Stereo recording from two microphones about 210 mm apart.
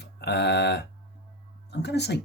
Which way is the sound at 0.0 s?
55° left (ahead or behind).